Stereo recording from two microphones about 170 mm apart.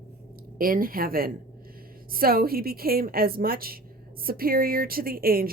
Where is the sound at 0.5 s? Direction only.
55° right (ahead or behind).